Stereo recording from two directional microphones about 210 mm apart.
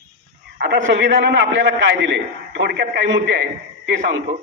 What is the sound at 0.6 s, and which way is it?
A man's voice, 60° right (ahead or behind).